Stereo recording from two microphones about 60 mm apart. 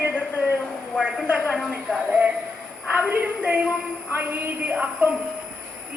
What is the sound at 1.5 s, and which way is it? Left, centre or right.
Speech, centre.